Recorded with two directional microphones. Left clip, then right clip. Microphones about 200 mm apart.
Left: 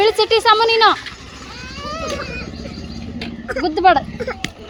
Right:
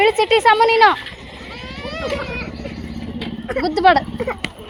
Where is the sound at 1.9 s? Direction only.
40° left (ahead or behind).